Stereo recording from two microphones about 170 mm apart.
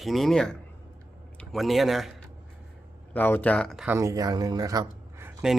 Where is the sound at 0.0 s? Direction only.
Centre (ahead or behind).